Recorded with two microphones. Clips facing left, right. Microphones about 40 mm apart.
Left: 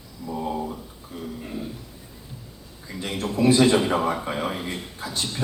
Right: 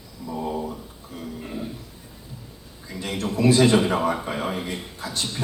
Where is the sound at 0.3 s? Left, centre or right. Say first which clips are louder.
Even; centre.